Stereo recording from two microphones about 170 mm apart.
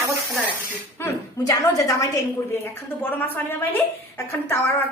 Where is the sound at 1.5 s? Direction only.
20° left (ahead or behind).